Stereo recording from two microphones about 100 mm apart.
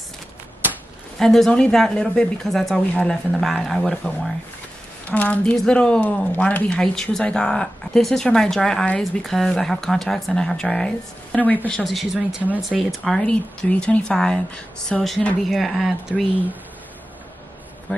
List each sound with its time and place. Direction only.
1.2 s speech: 5° left (ahead or behind)
11.8 s speech: centre (ahead or behind)